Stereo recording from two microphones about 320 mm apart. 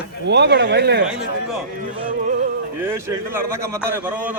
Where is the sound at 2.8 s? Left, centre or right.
Centre.